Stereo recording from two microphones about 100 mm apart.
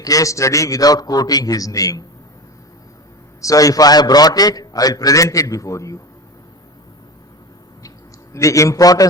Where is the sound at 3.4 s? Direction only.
35° left (ahead or behind).